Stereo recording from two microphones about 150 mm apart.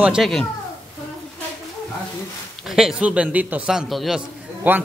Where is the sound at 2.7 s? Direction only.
5° right (ahead or behind).